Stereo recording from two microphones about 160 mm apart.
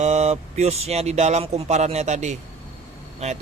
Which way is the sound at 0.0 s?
45° right (ahead or behind).